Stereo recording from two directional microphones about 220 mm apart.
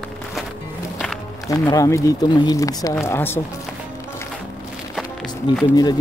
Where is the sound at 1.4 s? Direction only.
15° left (ahead or behind).